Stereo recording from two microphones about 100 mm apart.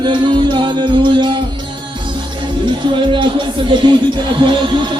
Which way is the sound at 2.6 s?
55° right (ahead or behind).